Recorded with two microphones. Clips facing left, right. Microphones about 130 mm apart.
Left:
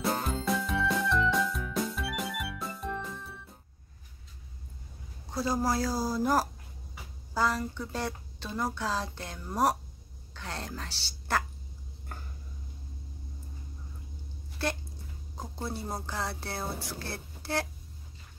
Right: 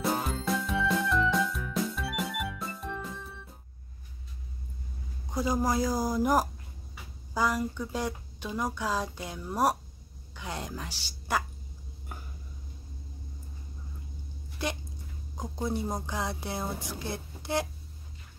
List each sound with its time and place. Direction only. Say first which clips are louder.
0.0 s music: right 1 dB; centre (ahead or behind)
5.3 s a woman's voice: right 1 dB; 15° right (ahead or behind)
14.6 s a woman's voice: left 1 dB; 15° right (ahead or behind)